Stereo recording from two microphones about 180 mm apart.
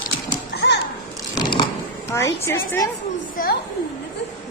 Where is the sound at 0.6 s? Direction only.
65° left (ahead or behind).